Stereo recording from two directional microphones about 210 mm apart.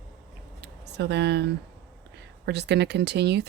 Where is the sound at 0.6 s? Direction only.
50° right (ahead or behind).